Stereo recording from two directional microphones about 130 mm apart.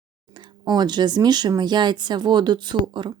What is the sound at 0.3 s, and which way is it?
Speech, 35° right (ahead or behind).